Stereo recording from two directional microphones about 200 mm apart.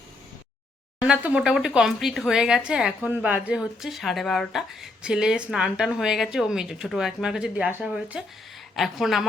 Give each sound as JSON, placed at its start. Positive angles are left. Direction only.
{"t": 1.0, "sound": "speech", "side_deg": -5}